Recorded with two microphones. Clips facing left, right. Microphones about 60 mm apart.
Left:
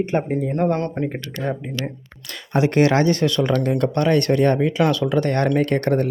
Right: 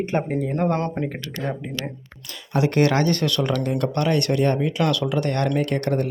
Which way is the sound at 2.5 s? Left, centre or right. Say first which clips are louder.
Left 3 dB; left.